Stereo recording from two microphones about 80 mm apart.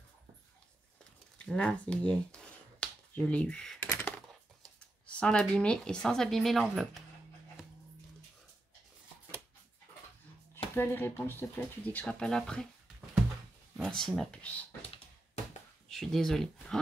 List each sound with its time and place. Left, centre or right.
1.4 s speech: centre
3.8 s coin: centre
5.0 s speech: centre
10.5 s speech: left; by 12.6 s centre
13.8 s speech: centre
14.3 s speech: centre
15.9 s speech: centre